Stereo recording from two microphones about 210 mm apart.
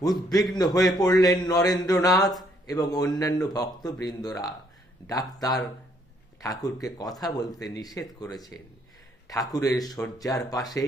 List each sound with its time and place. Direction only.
0.0 s speech: 20° left (ahead or behind)